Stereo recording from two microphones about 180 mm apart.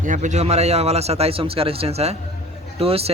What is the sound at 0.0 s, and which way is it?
A man's voice, 45° right (ahead or behind).